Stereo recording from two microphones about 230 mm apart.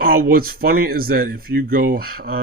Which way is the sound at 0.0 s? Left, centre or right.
Right.